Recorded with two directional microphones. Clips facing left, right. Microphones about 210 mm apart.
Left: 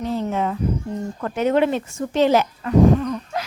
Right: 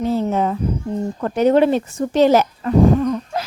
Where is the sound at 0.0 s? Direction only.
35° right (ahead or behind).